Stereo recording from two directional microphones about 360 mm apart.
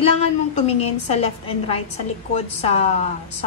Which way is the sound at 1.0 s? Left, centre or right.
Centre.